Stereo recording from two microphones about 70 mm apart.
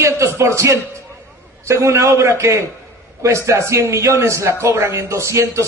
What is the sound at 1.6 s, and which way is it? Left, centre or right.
Speech, right.